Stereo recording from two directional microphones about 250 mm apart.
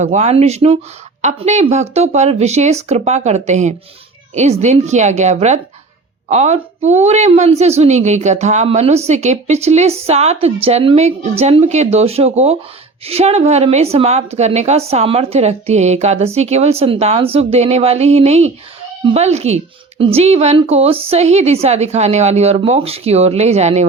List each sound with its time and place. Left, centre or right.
0.0 s a woman's voice: right